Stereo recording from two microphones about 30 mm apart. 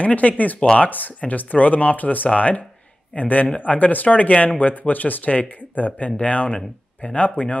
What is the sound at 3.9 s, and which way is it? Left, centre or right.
Speech, left.